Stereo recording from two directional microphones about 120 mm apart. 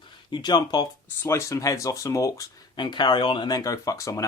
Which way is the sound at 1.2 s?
20° left (ahead or behind).